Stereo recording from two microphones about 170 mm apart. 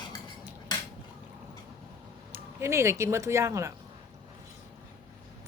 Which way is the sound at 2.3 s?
15° right (ahead or behind).